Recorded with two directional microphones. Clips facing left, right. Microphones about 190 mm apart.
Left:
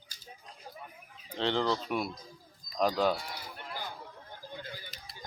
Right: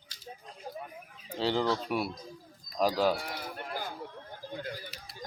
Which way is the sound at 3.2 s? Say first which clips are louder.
Right 4 dB; 55° right (ahead or behind).